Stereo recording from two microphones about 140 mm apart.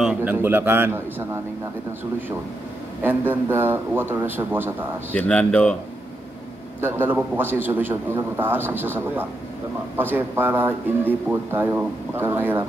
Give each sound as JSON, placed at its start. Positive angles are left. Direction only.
{"t": 0.0, "sound": "speech", "side_deg": -10}
{"t": 3.0, "sound": "speech", "side_deg": -15}
{"t": 5.1, "sound": "speech", "side_deg": 10}
{"t": 6.8, "sound": "speech", "side_deg": -15}